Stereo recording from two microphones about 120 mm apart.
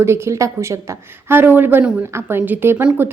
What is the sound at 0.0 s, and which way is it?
A woman's voice, 25° right (ahead or behind).